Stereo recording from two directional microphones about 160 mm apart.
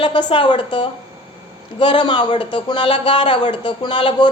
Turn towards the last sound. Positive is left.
turn(degrees=30)  # may be behind; listen again after turning